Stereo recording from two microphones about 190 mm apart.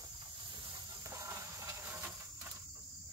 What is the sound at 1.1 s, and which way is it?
Hiss, 15° right (ahead or behind).